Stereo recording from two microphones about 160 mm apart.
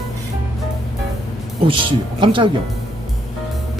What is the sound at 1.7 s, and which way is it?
Speech, 30° right (ahead or behind).